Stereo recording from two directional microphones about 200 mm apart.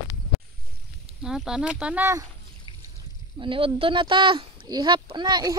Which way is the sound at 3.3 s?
25° right (ahead or behind).